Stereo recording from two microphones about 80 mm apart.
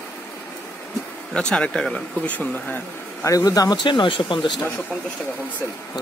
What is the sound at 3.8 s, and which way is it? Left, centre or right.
Speech, left.